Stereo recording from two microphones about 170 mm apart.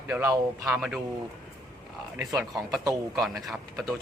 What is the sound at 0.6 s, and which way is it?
Speech, 5° right (ahead or behind).